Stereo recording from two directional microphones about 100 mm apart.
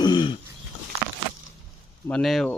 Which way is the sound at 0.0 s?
45° left (ahead or behind).